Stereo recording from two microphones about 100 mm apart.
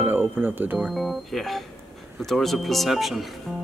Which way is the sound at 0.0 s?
20° right (ahead or behind).